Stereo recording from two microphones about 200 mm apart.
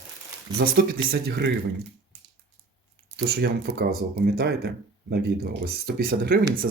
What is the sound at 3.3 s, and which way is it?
Speech, 55° right (ahead or behind).